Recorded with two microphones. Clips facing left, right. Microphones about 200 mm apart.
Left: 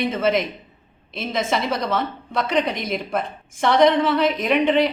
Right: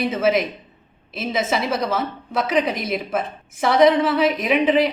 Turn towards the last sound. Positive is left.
turn(degrees=-5)  # may be behind; listen again after turning